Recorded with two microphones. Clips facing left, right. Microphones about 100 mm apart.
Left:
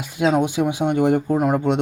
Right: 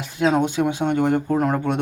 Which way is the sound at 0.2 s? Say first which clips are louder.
Left 1 dB; 15° left (ahead or behind).